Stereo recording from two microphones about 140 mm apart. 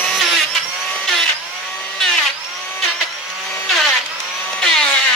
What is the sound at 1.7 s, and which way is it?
Tools, 5° left (ahead or behind).